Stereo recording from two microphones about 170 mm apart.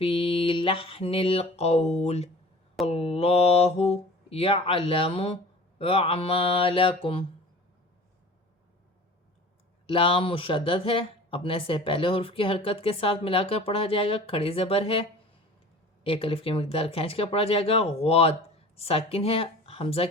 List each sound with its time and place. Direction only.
0.0 s speech: 30° left (ahead or behind)
9.8 s speech: 30° left (ahead or behind)
16.0 s speech: 30° left (ahead or behind)